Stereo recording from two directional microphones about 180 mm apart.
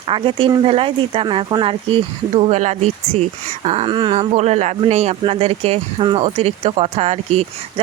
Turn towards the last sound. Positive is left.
turn(degrees=-35)  # may be behind; listen again after turning